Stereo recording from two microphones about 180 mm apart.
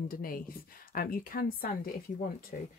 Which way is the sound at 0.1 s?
55° left (ahead or behind).